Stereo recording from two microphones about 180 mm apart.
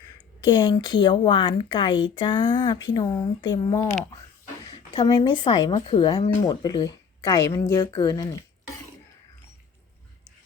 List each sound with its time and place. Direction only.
0.4 s speech: 25° left (ahead or behind)